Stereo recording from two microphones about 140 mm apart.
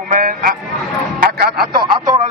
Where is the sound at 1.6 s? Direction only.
35° right (ahead or behind).